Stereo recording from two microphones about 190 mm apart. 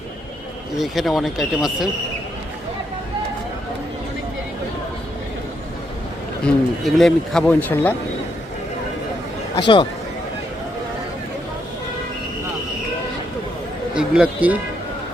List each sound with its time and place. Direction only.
0.8 s speech: centre (ahead or behind)
6.4 s speech: centre (ahead or behind)
9.6 s speech: 25° left (ahead or behind)
13.9 s speech: 5° right (ahead or behind)